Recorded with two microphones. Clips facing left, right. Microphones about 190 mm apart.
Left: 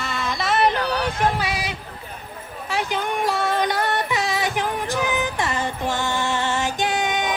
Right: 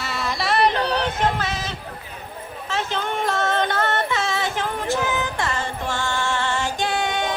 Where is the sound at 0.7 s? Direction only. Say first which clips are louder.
Right 1 dB; 30° right (ahead or behind).